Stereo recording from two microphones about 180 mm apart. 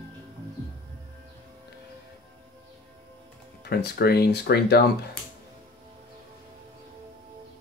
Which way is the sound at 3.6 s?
65° left (ahead or behind).